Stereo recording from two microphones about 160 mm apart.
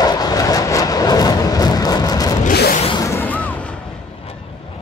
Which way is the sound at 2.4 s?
85° left.